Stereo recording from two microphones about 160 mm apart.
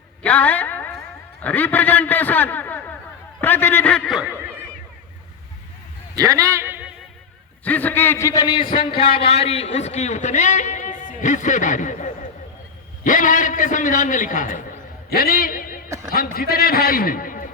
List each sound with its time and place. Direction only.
0.2 s a sound: 10° left (ahead or behind)
1.4 s a man's voice: 10° left (ahead or behind)
4.3 s neigh: 15° right (ahead or behind)
6.1 s a sound: 20° right (ahead or behind)
7.6 s a man's voice: 10° left (ahead or behind); by 14.6 s 55° left (ahead or behind)
15.1 s a man's voice: 65° left (ahead or behind)